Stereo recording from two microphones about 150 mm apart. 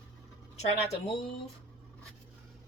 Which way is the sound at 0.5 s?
45° left (ahead or behind).